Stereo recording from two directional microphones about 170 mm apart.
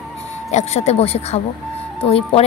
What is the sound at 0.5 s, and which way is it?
A woman's voice, 40° left (ahead or behind).